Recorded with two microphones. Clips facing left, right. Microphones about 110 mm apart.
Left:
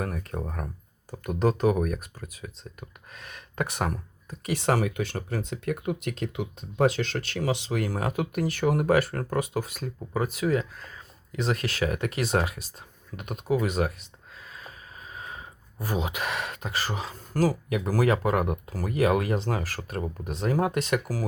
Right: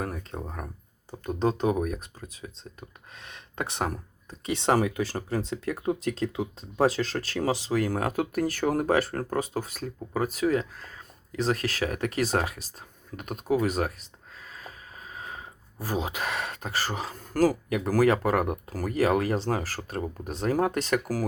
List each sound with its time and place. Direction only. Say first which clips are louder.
0.0 s speech: left 2 dB; 25° right (ahead or behind); by 21.2 s 45° right (ahead or behind)